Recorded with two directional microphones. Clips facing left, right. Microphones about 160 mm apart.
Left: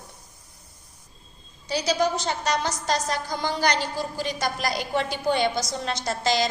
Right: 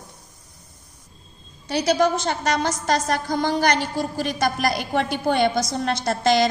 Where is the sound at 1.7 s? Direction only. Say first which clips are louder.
Right 4 dB; 60° right (ahead or behind).